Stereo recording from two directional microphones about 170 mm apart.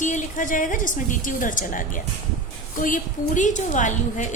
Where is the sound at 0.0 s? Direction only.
50° left (ahead or behind).